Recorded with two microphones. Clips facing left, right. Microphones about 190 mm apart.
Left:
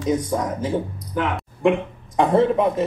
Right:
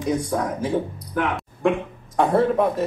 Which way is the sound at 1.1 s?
Centre (ahead or behind).